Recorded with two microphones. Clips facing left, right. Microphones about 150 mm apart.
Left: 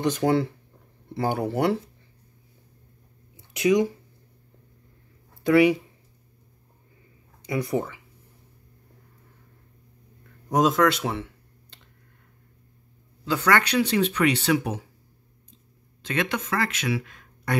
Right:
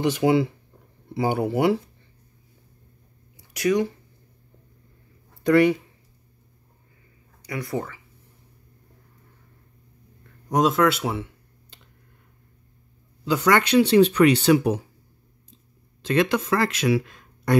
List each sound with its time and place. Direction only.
0.0 s speech: 10° right (ahead or behind)
3.3 s a sound: 20° left (ahead or behind)
5.3 s a sound: centre (ahead or behind)
7.4 s speech: 20° left (ahead or behind)
10.5 s speech: centre (ahead or behind)
13.2 s speech: 15° right (ahead or behind); by 14.8 s 35° right (ahead or behind)
16.0 s speech: 35° right (ahead or behind)